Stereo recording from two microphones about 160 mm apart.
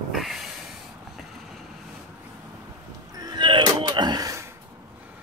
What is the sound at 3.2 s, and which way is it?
Music, 25° right (ahead or behind).